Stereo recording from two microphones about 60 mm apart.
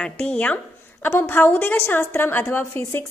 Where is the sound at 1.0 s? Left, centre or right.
Left.